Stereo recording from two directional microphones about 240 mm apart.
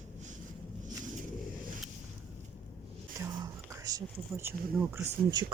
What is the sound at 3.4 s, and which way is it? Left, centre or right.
Speech, centre.